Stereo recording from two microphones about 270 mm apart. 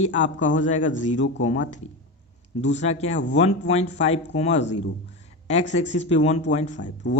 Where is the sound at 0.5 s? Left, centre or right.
Left.